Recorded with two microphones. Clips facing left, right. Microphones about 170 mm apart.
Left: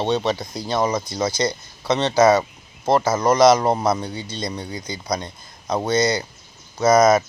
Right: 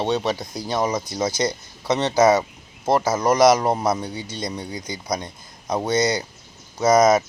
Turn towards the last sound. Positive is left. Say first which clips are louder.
# left 1 dB
turn(degrees=-15)  # may be behind; listen again after turning